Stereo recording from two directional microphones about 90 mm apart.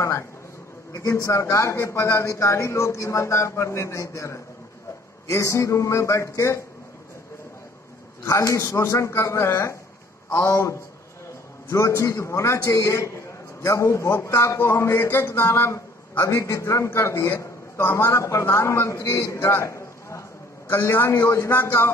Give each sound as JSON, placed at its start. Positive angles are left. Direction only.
{"t": 0.9, "sound": "a man's voice", "side_deg": 35}
{"t": 8.3, "sound": "a man's voice", "side_deg": 35}